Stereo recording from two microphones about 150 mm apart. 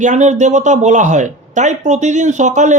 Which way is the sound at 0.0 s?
55° right (ahead or behind).